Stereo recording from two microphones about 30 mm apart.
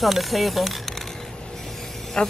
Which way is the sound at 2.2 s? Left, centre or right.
Left.